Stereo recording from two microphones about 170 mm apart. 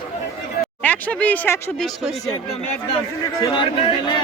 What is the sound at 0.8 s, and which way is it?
Speech, 10° left (ahead or behind).